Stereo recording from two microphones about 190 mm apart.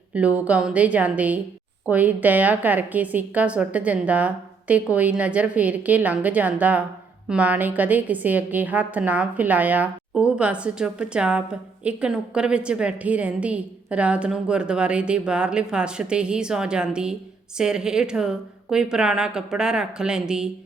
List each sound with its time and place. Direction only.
0.1 s a woman's voice: 5° right (ahead or behind)